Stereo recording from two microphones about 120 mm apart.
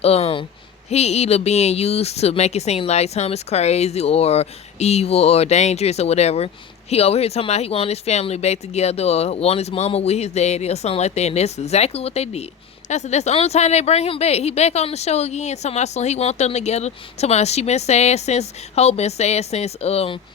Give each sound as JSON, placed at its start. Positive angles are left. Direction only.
{"t": 0.0, "sound": "speech", "side_deg": 60}
{"t": 12.9, "sound": "speech", "side_deg": 70}